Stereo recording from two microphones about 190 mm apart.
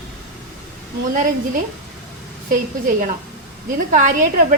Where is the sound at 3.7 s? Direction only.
45° right (ahead or behind).